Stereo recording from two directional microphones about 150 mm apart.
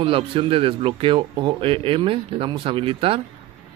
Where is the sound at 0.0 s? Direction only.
35° right (ahead or behind).